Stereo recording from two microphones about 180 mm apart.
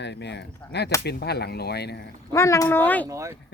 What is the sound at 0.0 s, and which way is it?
Speech, 70° left (ahead or behind).